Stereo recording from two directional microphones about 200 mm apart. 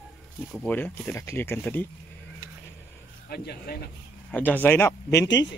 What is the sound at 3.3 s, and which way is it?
Speech, 50° left (ahead or behind).